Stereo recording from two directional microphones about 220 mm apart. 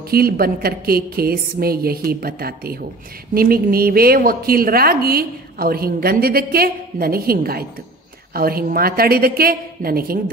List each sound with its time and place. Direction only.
0.1 s a woman's voice: 45° right (ahead or behind)